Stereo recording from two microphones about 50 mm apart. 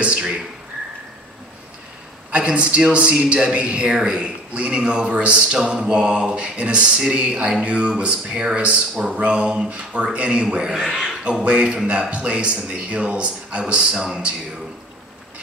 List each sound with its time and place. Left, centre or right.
0.0 s a man's voice: centre
2.3 s a man's voice: right
10.8 s speech: centre
11.4 s a man's voice: right